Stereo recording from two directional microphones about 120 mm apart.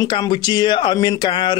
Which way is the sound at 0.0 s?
35° left (ahead or behind).